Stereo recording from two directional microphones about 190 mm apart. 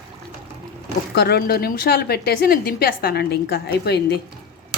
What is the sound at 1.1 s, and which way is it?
A woman's voice, 60° left (ahead or behind).